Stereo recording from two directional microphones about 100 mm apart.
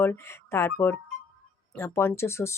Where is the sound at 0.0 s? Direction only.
25° left (ahead or behind).